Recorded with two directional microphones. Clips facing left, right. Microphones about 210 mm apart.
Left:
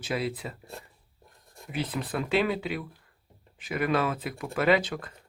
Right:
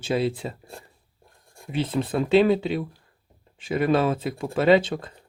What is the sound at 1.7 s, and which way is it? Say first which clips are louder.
Speech: right 6 dB; 25° right (ahead or behind).